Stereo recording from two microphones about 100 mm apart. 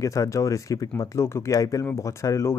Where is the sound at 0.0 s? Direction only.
35° left (ahead or behind).